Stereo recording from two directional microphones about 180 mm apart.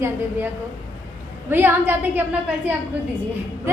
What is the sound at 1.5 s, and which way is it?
A woman's voice, 10° right (ahead or behind).